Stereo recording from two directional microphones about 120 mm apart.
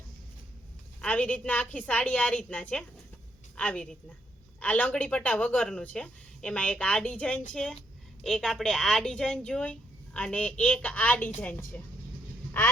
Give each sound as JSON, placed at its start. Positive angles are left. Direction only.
{"t": 1.0, "sound": "a woman's voice", "side_deg": 10}